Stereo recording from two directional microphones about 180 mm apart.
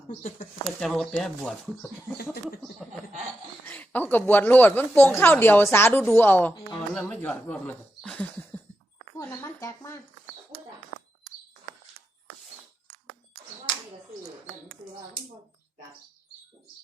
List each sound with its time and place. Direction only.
0.1 s speech: 45° left (ahead or behind)
0.8 s speech: centre (ahead or behind)
3.7 s speech: 10° left (ahead or behind)